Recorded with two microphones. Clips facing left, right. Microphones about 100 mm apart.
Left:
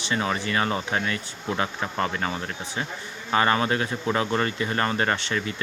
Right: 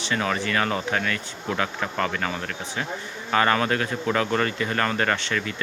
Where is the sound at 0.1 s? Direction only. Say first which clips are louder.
Right 1 dB; 25° left (ahead or behind).